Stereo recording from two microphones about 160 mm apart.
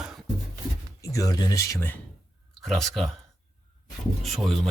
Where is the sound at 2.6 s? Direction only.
Centre (ahead or behind).